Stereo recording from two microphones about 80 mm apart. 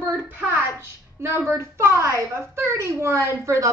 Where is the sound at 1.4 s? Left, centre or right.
Right.